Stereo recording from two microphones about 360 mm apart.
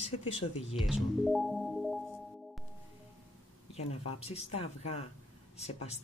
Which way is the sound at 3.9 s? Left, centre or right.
Centre.